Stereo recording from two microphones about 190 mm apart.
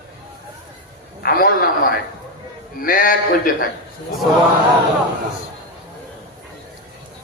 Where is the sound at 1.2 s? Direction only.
50° left (ahead or behind).